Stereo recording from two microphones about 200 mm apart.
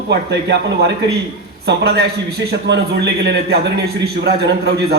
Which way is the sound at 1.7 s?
55° right (ahead or behind).